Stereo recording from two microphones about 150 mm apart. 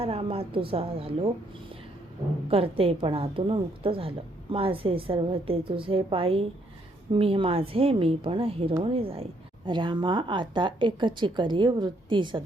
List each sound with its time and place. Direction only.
0.0 s a woman's voice: 40° right (ahead or behind)
2.5 s a woman's voice: 40° right (ahead or behind)